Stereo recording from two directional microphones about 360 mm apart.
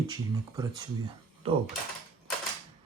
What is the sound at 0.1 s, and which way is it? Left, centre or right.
Speech, centre.